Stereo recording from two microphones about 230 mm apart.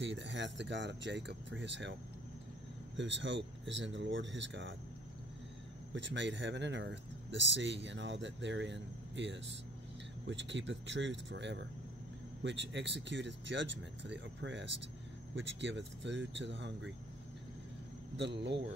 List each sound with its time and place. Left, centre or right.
0.0 s speech: right
3.0 s speech: right
5.9 s speech: right
18.1 s speech: right